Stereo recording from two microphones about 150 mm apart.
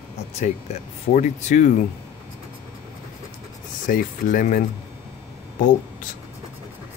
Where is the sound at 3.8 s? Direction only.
65° left (ahead or behind).